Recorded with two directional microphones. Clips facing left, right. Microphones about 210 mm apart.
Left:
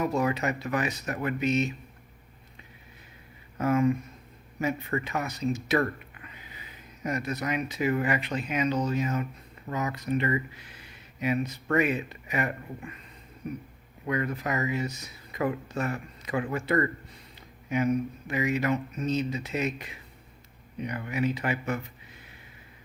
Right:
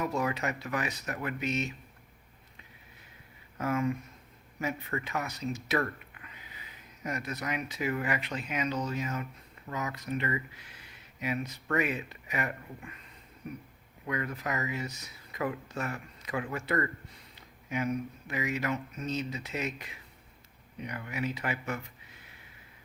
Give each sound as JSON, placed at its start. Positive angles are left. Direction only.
{"t": 0.0, "sound": "speech", "side_deg": 30}
{"t": 3.6, "sound": "speech", "side_deg": 30}
{"t": 14.1, "sound": "speech", "side_deg": 30}
{"t": 18.3, "sound": "speech", "side_deg": 25}